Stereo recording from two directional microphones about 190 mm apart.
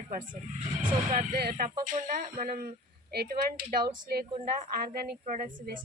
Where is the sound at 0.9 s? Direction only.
45° right (ahead or behind).